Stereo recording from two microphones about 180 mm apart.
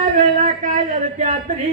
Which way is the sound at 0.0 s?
45° right (ahead or behind).